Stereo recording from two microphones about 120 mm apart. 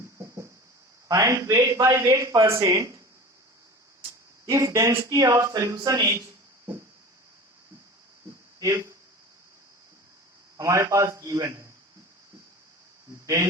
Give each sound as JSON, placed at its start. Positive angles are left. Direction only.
{"t": 1.0, "sound": "a man's voice", "side_deg": -30}
{"t": 4.4, "sound": "a man's voice", "side_deg": -25}
{"t": 8.5, "sound": "speech", "side_deg": -25}
{"t": 10.6, "sound": "a man's voice", "side_deg": -25}
{"t": 13.2, "sound": "speech", "side_deg": -25}